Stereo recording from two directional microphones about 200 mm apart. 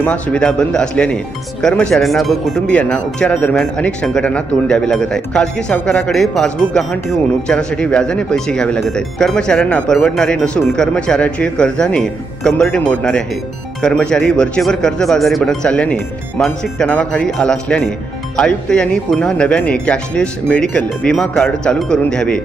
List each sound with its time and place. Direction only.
0.0 s speech: 5° left (ahead or behind)